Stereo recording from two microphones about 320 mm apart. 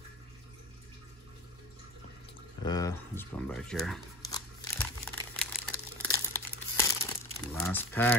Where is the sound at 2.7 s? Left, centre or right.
Centre.